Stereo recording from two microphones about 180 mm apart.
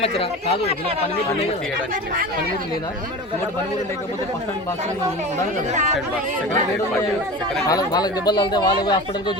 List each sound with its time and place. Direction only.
0.0 s speech: 35° left (ahead or behind)
5.7 s speech: 40° right (ahead or behind)
7.7 s speech: 20° left (ahead or behind)